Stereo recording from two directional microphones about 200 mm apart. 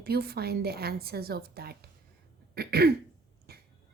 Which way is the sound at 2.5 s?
50° right (ahead or behind).